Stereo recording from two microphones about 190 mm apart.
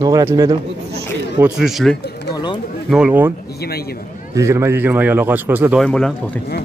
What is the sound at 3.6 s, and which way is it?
Speech, 55° left (ahead or behind).